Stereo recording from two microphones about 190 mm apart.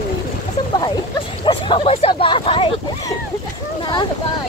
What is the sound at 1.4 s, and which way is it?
Speech, 25° left (ahead or behind).